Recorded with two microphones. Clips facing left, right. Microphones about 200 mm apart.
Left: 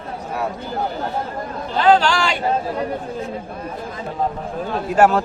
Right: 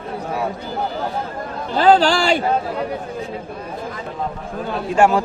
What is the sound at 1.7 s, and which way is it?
Speech, 35° right (ahead or behind).